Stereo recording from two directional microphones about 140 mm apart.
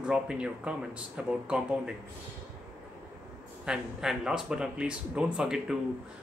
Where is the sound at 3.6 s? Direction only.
5° right (ahead or behind).